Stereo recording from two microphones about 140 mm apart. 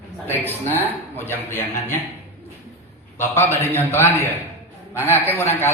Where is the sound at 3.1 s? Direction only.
15° left (ahead or behind).